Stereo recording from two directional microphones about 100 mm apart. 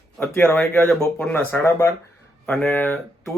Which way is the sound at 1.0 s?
10° left (ahead or behind).